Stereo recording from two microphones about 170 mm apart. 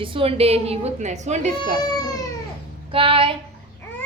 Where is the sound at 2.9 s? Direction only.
30° right (ahead or behind).